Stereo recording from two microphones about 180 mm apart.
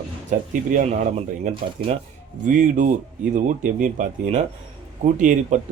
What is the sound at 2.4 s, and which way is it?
Speech, 45° right (ahead or behind).